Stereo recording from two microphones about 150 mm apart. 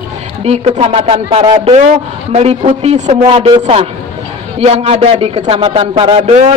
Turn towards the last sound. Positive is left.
turn(degrees=-45)  # may be behind; listen again after turning